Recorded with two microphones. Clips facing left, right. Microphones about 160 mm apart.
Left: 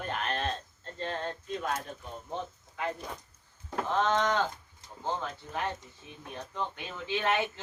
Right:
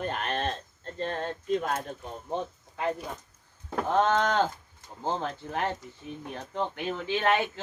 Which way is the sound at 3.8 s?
50° right (ahead or behind).